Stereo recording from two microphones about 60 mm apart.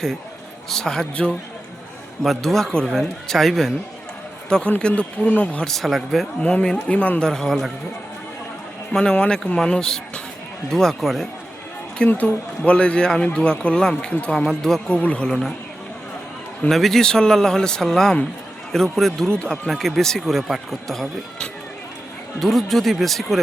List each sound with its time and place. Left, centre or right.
0.7 s speech: centre
2.2 s a man's voice: centre; by 5.6 s left
5.6 s a man's voice: centre
6.4 s speech: centre
7.3 s speech: centre
8.9 s speech: centre
12.0 s speech: left
14.4 s speech: centre
15.3 s a man's voice: centre
16.6 s a man's voice: centre
19.6 s a man's voice: centre
22.4 s a man's voice: centre